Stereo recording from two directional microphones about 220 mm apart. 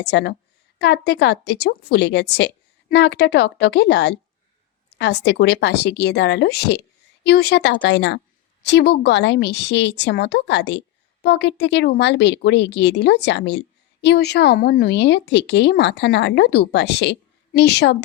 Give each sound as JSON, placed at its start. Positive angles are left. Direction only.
{"t": 0.0, "sound": "a woman's voice", "side_deg": 50}